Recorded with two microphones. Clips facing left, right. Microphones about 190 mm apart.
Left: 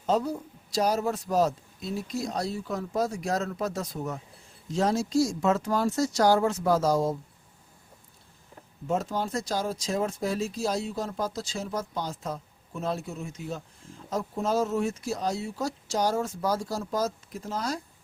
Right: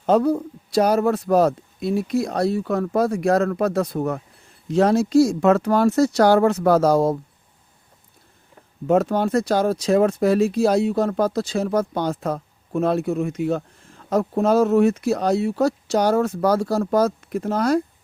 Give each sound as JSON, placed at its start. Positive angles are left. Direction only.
{"t": 0.0, "sound": "speech", "side_deg": -60}
{"t": 8.9, "sound": "speech", "side_deg": -65}